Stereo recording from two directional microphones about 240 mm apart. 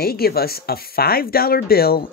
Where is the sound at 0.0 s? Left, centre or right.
Left.